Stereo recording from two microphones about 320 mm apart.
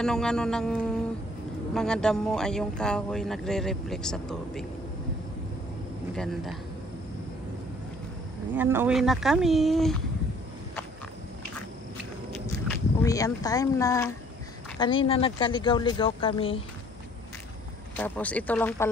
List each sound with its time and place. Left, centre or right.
0.0 s speech: centre
6.1 s speech: centre
8.5 s speech: centre
12.6 s speech: centre
17.9 s speech: centre